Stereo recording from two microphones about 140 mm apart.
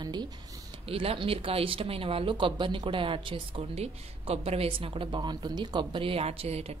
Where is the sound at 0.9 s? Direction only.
40° right (ahead or behind).